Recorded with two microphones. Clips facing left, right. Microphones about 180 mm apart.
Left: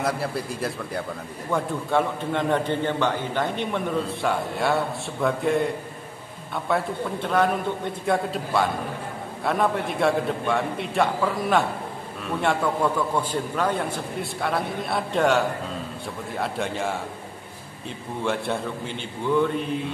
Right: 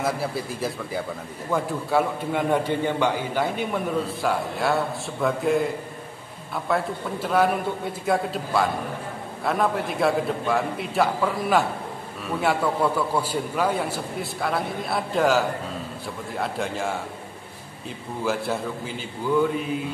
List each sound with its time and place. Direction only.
0.0 s a man's voice: centre (ahead or behind)
18.2 s a man's voice: 5° right (ahead or behind)